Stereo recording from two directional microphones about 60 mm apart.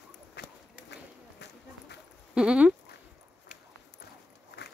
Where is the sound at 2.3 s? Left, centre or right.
Centre.